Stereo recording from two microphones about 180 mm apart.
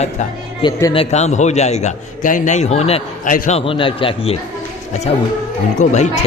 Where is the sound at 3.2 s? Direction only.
45° left (ahead or behind); by 4.3 s 30° left (ahead or behind).